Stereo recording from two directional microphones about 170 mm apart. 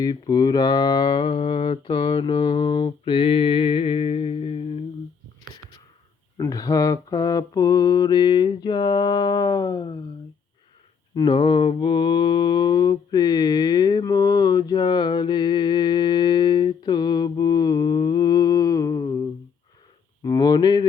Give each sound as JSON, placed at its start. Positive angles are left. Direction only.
{"t": 0.0, "sound": "mantra", "side_deg": 25}
{"t": 6.4, "sound": "mantra", "side_deg": 20}
{"t": 11.1, "sound": "mantra", "side_deg": 30}
{"t": 20.2, "sound": "mantra", "side_deg": 25}